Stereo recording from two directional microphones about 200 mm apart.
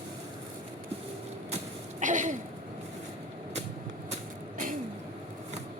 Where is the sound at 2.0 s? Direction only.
40° right (ahead or behind).